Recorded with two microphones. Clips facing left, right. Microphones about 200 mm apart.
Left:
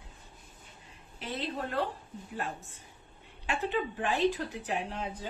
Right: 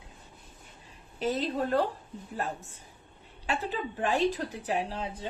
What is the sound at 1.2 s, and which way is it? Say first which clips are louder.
Speech: right 7 dB; 40° right (ahead or behind).